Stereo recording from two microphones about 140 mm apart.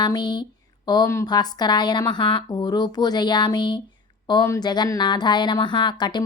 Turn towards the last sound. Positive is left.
turn(degrees=30)  # may be behind; listen again after turning